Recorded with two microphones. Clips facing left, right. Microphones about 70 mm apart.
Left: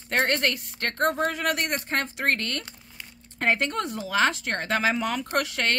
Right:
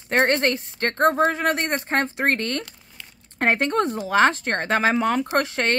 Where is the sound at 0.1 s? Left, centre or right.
Right.